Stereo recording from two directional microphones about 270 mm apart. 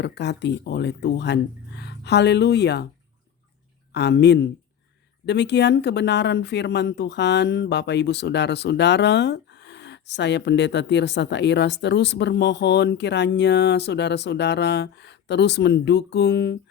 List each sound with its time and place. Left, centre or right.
0.0 s speech: left
3.9 s speech: left